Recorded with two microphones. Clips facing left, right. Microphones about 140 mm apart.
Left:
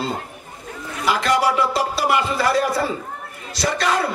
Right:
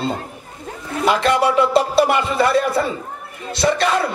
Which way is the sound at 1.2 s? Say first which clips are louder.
Right 1 dB; 25° right (ahead or behind).